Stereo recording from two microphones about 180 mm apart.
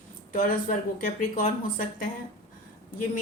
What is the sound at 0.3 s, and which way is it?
A woman's voice, 50° left (ahead or behind).